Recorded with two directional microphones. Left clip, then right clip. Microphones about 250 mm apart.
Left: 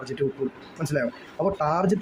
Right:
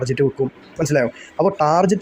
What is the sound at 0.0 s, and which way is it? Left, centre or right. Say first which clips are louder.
Speech: right 8 dB; centre.